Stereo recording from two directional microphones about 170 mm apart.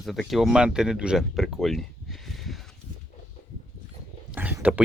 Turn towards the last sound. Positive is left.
turn(degrees=-10)  # may be behind; listen again after turning